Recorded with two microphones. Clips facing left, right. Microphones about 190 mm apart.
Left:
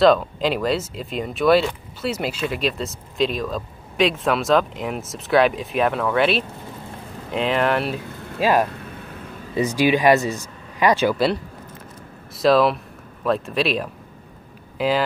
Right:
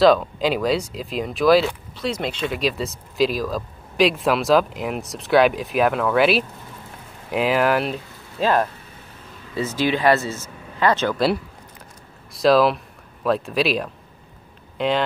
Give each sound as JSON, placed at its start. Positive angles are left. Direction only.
{"t": 0.0, "sound": "speech", "side_deg": 0}
{"t": 8.4, "sound": "speech", "side_deg": 10}
{"t": 8.7, "sound": "vehicle", "side_deg": 60}
{"t": 9.6, "sound": "speech", "side_deg": 15}
{"t": 12.4, "sound": "speech", "side_deg": 0}